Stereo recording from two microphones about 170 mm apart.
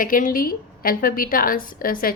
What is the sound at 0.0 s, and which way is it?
A woman's voice, 55° left (ahead or behind).